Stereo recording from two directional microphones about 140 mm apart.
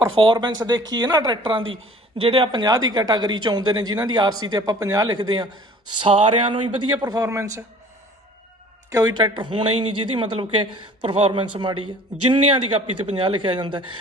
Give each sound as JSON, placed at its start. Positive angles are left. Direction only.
{"t": 0.2, "sound": "speech", "side_deg": -35}
{"t": 6.0, "sound": "speech", "side_deg": -40}
{"t": 8.9, "sound": "speech", "side_deg": -30}
{"t": 13.1, "sound": "speech", "side_deg": -35}